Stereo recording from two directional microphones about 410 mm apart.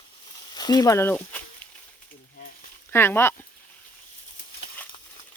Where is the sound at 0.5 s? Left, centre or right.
Centre.